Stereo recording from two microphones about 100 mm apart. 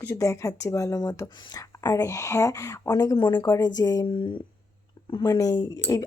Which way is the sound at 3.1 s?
50° left (ahead or behind).